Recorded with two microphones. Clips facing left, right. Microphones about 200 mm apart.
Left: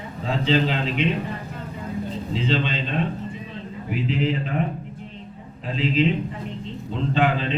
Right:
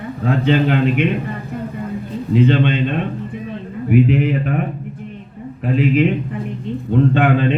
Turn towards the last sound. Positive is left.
turn(degrees=-55)  # may be behind; listen again after turning